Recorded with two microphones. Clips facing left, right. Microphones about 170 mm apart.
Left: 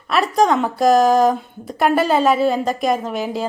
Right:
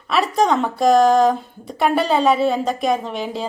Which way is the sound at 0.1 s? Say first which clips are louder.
Left 1 dB; centre (ahead or behind).